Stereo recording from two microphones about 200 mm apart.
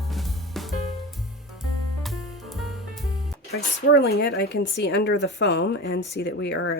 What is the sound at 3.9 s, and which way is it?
Speech, 50° left (ahead or behind).